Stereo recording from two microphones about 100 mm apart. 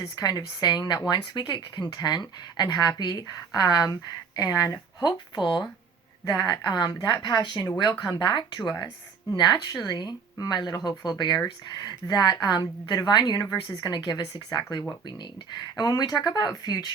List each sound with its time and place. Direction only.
0.0 s a woman's voice: 40° left (ahead or behind)
15.8 s speech: 40° left (ahead or behind)